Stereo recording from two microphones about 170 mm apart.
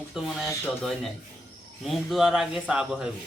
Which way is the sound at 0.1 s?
Centre (ahead or behind).